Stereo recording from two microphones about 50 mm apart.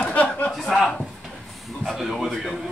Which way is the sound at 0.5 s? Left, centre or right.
Centre.